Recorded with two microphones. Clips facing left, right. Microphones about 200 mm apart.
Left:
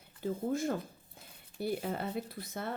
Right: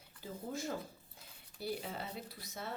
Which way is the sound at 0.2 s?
55° left (ahead or behind).